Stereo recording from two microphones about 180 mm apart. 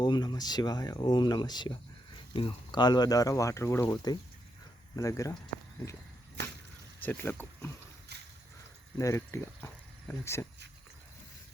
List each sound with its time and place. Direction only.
0.0 s speech: 25° left (ahead or behind)
7.0 s speech: 10° left (ahead or behind)
8.1 s a sound: 65° right (ahead or behind)
9.0 s speech: 15° left (ahead or behind)